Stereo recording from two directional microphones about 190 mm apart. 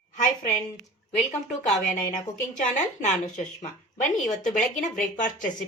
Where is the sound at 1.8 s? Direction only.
45° left (ahead or behind).